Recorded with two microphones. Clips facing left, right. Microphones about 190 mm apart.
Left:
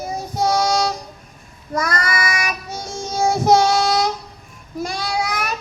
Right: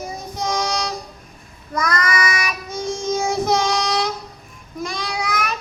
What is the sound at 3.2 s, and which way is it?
Child singing, 40° left (ahead or behind).